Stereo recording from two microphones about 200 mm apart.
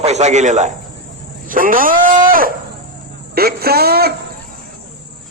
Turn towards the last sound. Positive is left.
turn(degrees=-50)  # may be behind; listen again after turning